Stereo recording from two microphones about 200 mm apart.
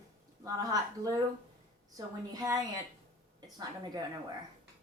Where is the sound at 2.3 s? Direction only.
20° right (ahead or behind).